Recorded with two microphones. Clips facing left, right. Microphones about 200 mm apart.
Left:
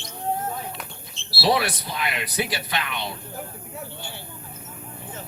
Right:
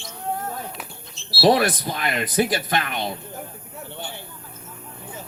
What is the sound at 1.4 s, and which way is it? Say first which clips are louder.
Speech: right 5 dB; 50° right (ahead or behind).